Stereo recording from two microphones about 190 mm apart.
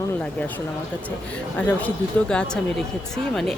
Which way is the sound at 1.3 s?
5° left (ahead or behind).